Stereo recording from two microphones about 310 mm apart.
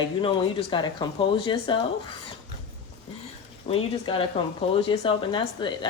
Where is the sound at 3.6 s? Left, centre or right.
Centre.